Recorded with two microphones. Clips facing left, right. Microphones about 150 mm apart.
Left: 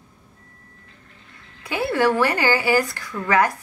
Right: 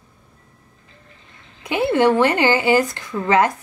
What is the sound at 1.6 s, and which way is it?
Speech, 20° right (ahead or behind).